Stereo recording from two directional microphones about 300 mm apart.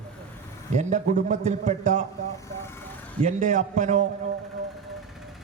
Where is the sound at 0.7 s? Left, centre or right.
Right.